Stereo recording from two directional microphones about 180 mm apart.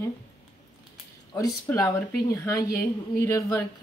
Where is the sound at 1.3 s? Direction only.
20° left (ahead or behind).